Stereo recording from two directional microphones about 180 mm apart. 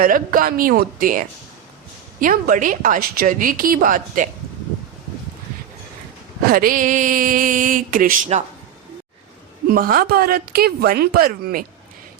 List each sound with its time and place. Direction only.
0.0 s a woman's voice: 50° right (ahead or behind)
2.2 s a woman's voice: 50° right (ahead or behind)
6.5 s a woman's voice: 50° right (ahead or behind)
9.6 s a woman's voice: 55° right (ahead or behind)